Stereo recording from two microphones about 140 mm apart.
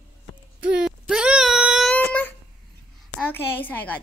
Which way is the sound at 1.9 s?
10° left (ahead or behind).